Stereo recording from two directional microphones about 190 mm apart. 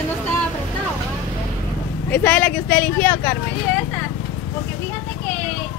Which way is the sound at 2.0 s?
10° left (ahead or behind).